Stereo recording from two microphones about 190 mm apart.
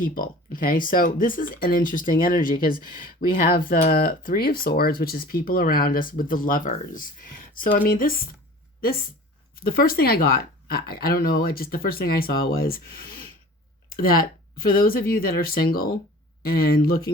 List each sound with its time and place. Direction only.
0.0 s speech: 45° left (ahead or behind)
9.7 s speech: 50° left (ahead or behind)